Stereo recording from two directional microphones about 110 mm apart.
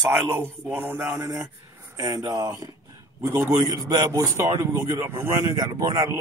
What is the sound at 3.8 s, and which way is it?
Speech, 35° right (ahead or behind).